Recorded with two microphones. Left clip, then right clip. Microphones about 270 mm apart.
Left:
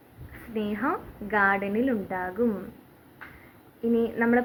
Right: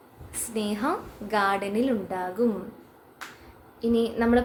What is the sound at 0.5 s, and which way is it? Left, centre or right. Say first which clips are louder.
A woman's voice: right 1 dB; right.